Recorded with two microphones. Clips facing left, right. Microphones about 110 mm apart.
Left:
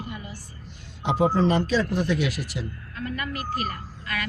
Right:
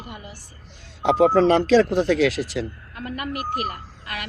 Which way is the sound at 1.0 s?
85° right.